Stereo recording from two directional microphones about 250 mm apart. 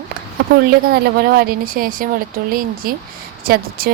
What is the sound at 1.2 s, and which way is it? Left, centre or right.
Speech, right.